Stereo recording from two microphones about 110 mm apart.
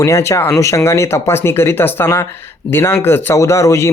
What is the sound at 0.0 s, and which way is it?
Speech, 25° left (ahead or behind).